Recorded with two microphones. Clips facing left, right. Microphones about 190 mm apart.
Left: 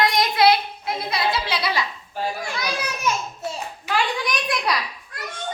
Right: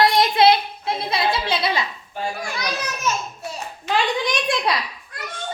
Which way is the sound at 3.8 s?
20° right (ahead or behind).